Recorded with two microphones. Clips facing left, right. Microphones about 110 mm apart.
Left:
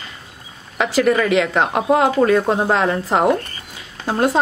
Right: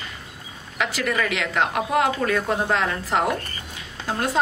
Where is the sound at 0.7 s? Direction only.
30° left (ahead or behind).